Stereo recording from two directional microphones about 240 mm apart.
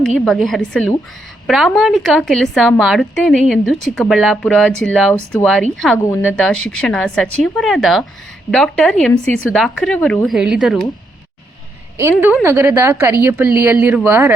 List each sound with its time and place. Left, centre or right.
0.0 s a woman's voice: centre
11.9 s a woman's voice: centre